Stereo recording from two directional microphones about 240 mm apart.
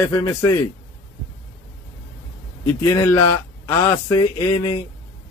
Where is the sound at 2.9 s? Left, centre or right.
Centre.